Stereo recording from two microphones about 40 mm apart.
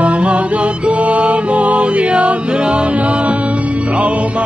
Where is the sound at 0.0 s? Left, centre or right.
Right.